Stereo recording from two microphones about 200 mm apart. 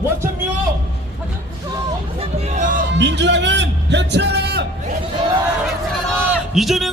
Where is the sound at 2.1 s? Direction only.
35° right (ahead or behind).